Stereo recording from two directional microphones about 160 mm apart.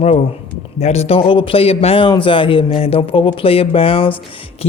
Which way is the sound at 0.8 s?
45° left (ahead or behind).